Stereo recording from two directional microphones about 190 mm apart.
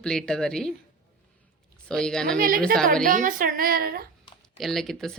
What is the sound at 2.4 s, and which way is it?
Speech, 50° right (ahead or behind).